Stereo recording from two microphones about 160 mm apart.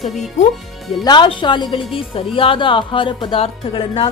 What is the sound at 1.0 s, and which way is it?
A woman's voice, 30° left (ahead or behind).